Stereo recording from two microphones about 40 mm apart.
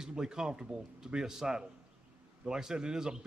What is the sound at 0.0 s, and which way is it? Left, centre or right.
A man's voice, centre.